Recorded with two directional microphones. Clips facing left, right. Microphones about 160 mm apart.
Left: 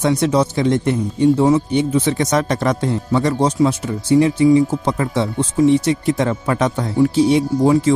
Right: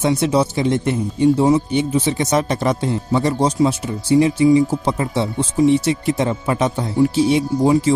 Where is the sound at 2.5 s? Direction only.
25° right (ahead or behind).